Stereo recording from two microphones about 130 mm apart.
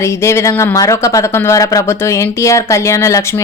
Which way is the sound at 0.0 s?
20° left (ahead or behind).